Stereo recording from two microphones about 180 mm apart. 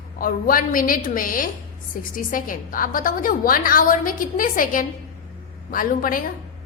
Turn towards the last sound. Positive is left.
turn(degrees=50)  # may be behind; listen again after turning